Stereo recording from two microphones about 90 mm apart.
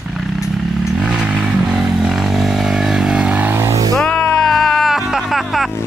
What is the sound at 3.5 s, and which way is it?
Music, 30° right (ahead or behind).